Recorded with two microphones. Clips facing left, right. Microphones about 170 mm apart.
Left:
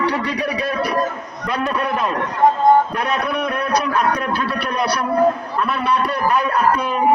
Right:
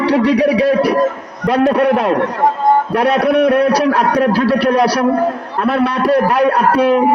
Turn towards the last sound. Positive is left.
turn(degrees=-90)